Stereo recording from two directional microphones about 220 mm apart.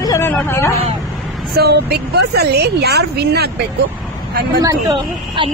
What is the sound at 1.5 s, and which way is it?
A woman's voice, 45° right (ahead or behind).